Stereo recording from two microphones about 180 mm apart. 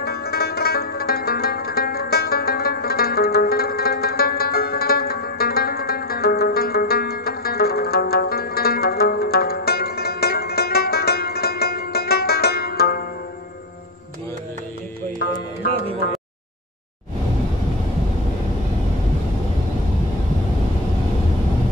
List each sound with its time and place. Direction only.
0.0 s zither: 60° left (ahead or behind)
15.1 s music: 65° left (ahead or behind)